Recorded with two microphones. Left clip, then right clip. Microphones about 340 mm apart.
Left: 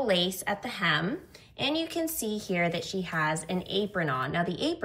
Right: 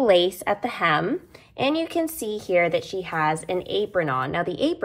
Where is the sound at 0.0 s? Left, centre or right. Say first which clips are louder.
Right 9 dB; centre.